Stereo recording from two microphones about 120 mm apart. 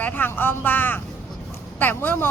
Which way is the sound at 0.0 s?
15° left (ahead or behind).